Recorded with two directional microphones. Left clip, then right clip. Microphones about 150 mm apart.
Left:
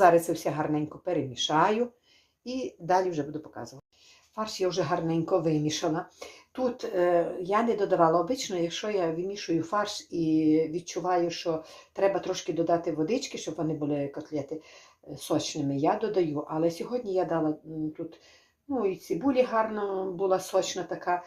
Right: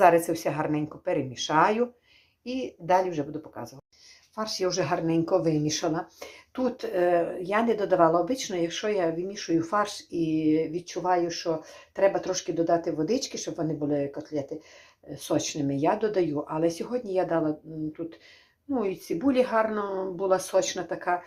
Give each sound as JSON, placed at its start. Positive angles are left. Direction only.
{"t": 0.0, "sound": "speech", "side_deg": -20}
{"t": 10.2, "sound": "speech", "side_deg": -20}
{"t": 18.7, "sound": "speech", "side_deg": -30}